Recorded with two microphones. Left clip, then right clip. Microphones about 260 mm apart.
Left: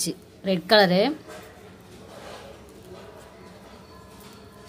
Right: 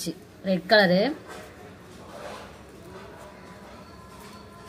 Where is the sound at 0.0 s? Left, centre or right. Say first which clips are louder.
Left 3 dB; left.